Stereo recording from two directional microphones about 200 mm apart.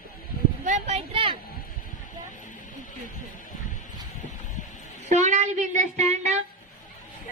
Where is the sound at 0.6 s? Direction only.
35° right (ahead or behind).